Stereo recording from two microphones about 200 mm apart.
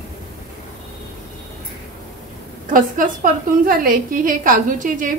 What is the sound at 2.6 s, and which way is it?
A woman's voice, 40° right (ahead or behind).